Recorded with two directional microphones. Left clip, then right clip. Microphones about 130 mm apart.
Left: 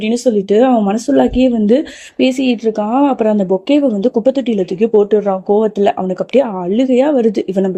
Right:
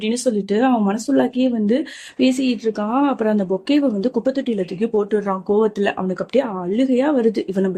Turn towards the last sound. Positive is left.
turn(degrees=40)  # may be behind; listen again after turning